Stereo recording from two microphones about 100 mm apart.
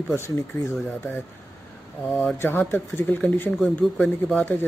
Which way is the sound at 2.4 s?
20° left (ahead or behind).